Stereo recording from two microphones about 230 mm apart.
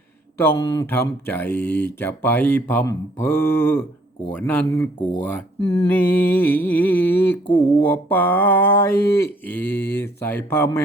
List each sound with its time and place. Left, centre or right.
0.3 s speech: centre
5.5 s mantra: left
5.9 s speech: centre